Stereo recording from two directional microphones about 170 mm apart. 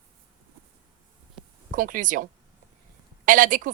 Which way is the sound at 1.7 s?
55° right (ahead or behind).